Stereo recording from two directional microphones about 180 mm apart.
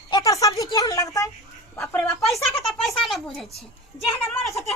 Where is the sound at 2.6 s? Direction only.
Centre (ahead or behind).